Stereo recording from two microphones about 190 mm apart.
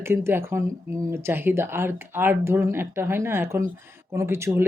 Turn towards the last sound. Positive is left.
turn(degrees=-15)  # may be behind; listen again after turning